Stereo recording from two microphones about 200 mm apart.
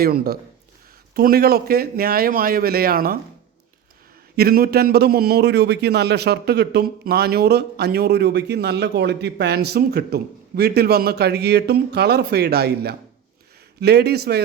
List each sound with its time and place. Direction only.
0.0 s a man's voice: 50° right (ahead or behind)
4.4 s a man's voice: 50° right (ahead or behind)